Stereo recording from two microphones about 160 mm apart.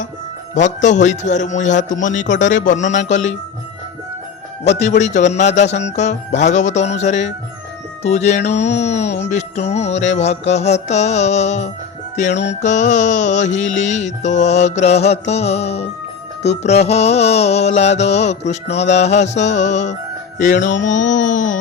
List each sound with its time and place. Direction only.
0.5 s music: 50° left (ahead or behind)
4.6 s music: 45° left (ahead or behind)
12.3 s music: 90° left
12.6 s music: 50° left (ahead or behind)